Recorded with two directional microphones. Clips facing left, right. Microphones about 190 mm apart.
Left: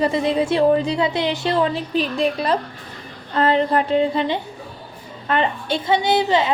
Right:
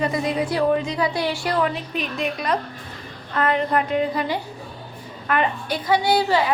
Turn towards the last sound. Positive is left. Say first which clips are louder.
# left 1 dB
turn(degrees=20)  # may be behind; listen again after turning